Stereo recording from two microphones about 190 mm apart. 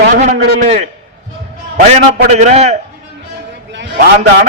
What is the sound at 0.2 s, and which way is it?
A man's voice, 40° right (ahead or behind).